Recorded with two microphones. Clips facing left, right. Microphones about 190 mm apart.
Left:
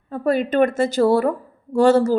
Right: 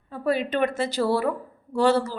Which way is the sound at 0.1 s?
50° left (ahead or behind).